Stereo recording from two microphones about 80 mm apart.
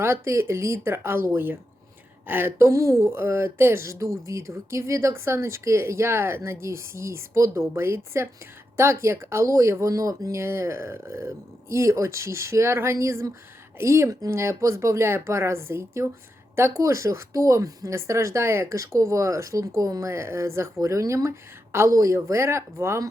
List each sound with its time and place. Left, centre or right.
0.0 s speech: right
2.2 s a sound: right
2.6 s speech: right